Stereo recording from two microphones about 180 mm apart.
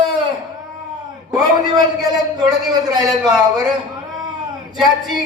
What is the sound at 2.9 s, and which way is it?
Speech, 20° right (ahead or behind).